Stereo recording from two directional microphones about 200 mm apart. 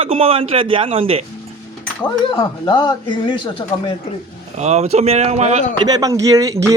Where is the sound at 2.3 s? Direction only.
25° left (ahead or behind).